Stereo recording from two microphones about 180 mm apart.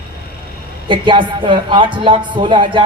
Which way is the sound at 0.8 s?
25° right (ahead or behind).